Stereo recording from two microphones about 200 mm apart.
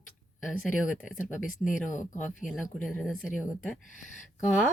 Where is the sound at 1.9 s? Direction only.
40° left (ahead or behind).